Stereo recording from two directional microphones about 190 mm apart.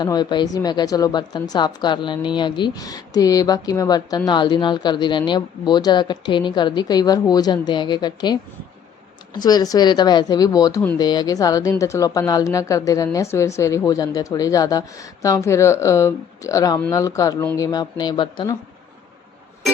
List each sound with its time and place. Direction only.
0.0 s speech: 20° left (ahead or behind)